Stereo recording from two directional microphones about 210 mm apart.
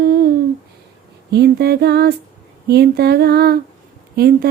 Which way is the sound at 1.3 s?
50° right (ahead or behind).